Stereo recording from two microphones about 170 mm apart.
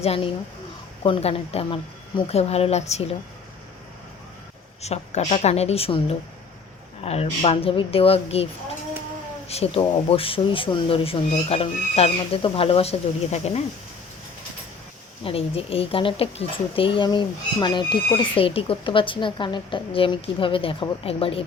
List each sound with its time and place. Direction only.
0.0 s speech: 35° left (ahead or behind)
4.8 s speech: 40° left (ahead or behind)
9.5 s speech: 35° left (ahead or behind)
15.2 s speech: 35° left (ahead or behind)